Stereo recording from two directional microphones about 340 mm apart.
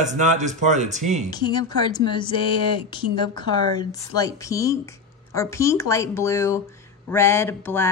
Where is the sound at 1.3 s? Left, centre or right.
Centre.